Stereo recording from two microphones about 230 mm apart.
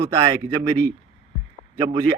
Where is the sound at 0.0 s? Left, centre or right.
Centre.